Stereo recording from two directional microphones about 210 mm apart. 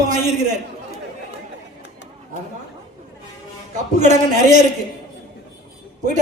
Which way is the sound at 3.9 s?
35° right (ahead or behind).